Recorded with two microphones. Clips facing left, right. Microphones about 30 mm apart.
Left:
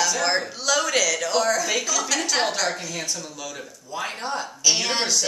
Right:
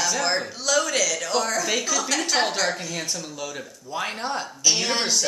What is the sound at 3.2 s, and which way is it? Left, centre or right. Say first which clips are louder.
Speech: right 2 dB; centre.